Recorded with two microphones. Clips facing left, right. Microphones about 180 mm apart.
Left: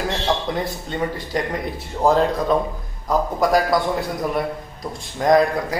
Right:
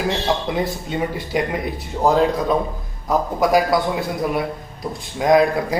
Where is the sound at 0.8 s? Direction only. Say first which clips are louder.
Right 1 dB; 10° right (ahead or behind).